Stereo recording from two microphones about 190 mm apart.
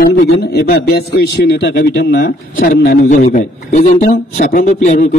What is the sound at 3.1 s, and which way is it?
A man's voice, 40° left (ahead or behind).